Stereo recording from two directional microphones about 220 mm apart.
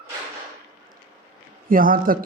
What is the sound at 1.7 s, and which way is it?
Speech, 40° right (ahead or behind).